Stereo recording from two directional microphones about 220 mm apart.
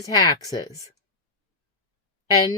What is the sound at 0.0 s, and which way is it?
Speech, 15° left (ahead or behind).